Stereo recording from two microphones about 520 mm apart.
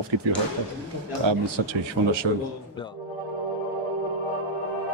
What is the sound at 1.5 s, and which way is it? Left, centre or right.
Speech, right.